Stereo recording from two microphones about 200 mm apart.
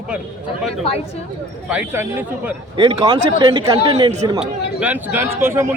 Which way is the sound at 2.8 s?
25° right (ahead or behind).